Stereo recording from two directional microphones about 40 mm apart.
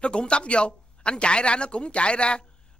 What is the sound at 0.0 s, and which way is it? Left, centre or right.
A child's voice, left.